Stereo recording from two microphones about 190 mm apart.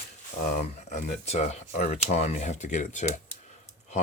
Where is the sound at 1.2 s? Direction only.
35° left (ahead or behind).